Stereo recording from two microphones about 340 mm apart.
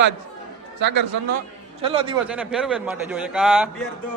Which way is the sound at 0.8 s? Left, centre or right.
Right.